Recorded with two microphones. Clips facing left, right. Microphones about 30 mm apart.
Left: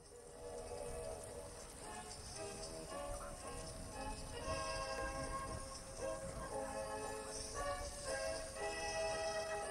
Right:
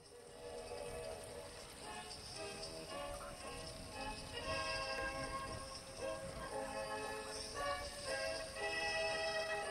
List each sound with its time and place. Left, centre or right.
0.7 s train: right
2.4 s music: right
4.0 s train: right
6.4 s music: right